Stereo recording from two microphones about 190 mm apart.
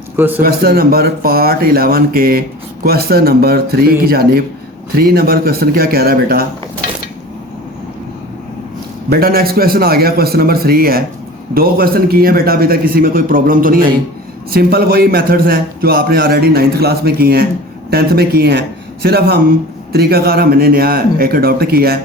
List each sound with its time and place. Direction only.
0.2 s a man's voice: 10° right (ahead or behind)
0.4 s a man's voice: 55° right (ahead or behind)
9.0 s a man's voice: 55° right (ahead or behind)